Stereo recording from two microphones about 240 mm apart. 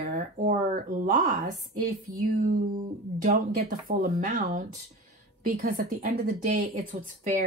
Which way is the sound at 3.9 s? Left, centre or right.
Right.